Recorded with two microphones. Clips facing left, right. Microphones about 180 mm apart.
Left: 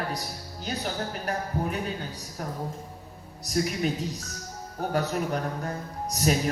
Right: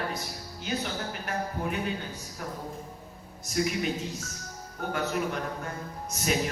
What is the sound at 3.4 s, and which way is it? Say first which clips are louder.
Speech: left 2 dB; 40° left (ahead or behind).